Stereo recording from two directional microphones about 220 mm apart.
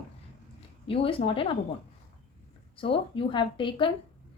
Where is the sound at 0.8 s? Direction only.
25° left (ahead or behind).